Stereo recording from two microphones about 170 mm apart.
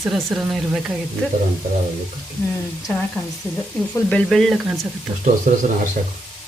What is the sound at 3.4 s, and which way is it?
Speech, 15° left (ahead or behind).